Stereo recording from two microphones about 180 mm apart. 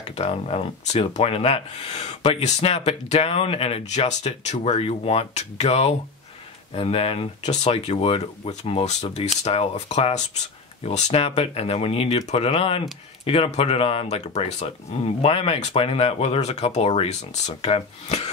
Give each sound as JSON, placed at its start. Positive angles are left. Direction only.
{"t": 0.1, "sound": "speech", "side_deg": 35}